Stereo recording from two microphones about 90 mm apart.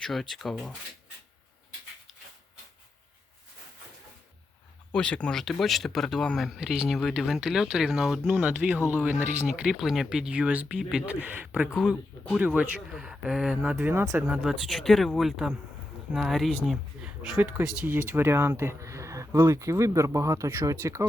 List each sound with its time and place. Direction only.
0.0 s speech: 5° left (ahead or behind)
4.9 s speech: 10° left (ahead or behind); by 17.9 s 15° right (ahead or behind)
17.9 s speech: 25° right (ahead or behind)